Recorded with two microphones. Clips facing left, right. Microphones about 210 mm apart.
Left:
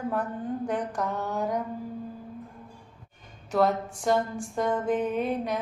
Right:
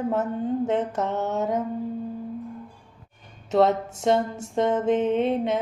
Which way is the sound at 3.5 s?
25° right (ahead or behind).